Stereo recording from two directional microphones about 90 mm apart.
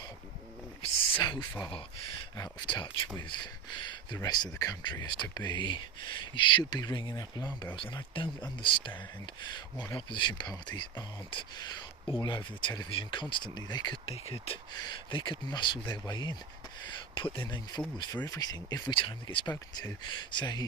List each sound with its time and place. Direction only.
1.2 s speech: 55° left (ahead or behind)
2.6 s speech: 65° left (ahead or behind)
4.5 s speech: 40° left (ahead or behind)
4.8 s speech: 55° left (ahead or behind)
7.8 s speech: 75° left (ahead or behind)
9.2 s speech: 55° left (ahead or behind)
14.1 s speech: 90° left
14.8 s speech: 60° left (ahead or behind)
16.8 s speech: 75° left (ahead or behind)
17.5 s speech: 55° left (ahead or behind)
18.9 s speech: 70° left (ahead or behind)
19.7 s speech: 50° left (ahead or behind)